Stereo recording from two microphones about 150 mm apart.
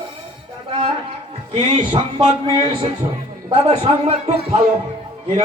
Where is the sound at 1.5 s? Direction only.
35° right (ahead or behind).